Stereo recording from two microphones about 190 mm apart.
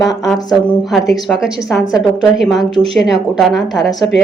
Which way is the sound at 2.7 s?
30° right (ahead or behind).